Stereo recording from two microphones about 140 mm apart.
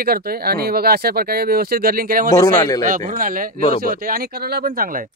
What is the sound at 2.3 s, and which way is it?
Speech, 25° left (ahead or behind).